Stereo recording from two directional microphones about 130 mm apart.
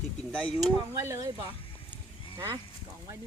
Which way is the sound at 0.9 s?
20° right (ahead or behind).